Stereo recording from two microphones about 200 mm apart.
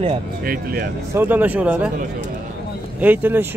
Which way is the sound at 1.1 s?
10° right (ahead or behind).